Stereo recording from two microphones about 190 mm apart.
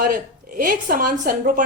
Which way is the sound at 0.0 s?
50° right (ahead or behind).